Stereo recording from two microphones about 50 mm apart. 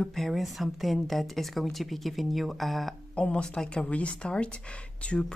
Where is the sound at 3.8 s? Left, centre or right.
Left.